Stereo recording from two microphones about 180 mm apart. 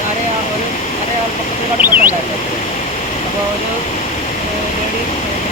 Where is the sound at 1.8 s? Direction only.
10° right (ahead or behind).